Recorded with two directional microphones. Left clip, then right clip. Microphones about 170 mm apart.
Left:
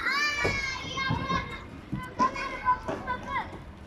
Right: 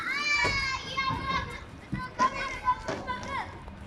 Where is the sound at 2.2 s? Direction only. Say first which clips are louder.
Even; 25° left (ahead or behind).